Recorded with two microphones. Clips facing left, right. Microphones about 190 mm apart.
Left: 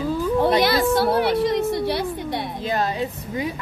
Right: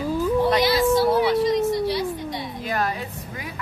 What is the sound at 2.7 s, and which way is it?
Speech, 25° left (ahead or behind).